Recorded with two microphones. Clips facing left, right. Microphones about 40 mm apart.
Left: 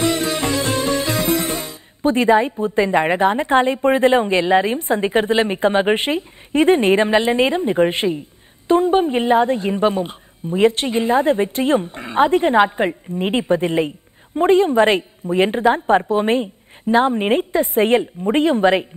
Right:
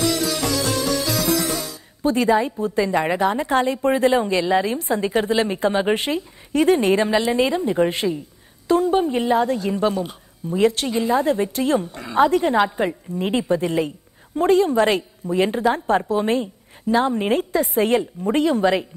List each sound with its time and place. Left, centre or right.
0.0 s music: left
2.6 s a woman's voice: left